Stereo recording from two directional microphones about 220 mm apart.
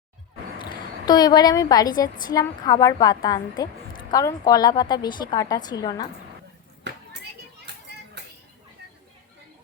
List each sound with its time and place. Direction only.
0.6 s a woman's voice: 20° left (ahead or behind)